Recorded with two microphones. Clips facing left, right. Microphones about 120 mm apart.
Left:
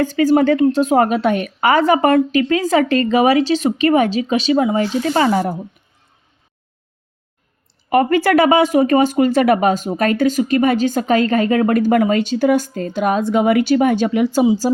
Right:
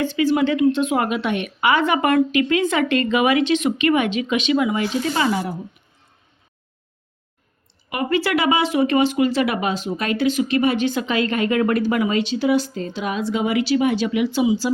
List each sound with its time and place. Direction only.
0.0 s a woman's voice: 40° left (ahead or behind)
7.9 s speech: 45° left (ahead or behind)